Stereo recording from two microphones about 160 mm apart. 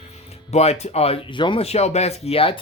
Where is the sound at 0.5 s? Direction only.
40° left (ahead or behind).